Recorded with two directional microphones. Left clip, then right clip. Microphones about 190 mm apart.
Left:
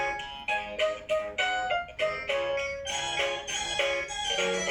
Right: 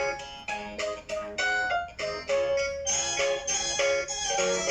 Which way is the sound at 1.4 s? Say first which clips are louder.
Right 1 dB; 45° right (ahead or behind).